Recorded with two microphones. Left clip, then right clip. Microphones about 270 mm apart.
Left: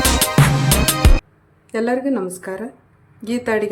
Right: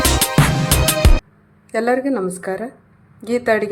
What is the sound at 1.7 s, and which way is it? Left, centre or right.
A woman's voice, centre.